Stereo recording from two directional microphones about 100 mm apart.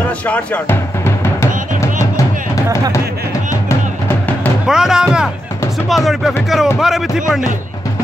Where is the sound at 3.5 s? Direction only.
30° left (ahead or behind).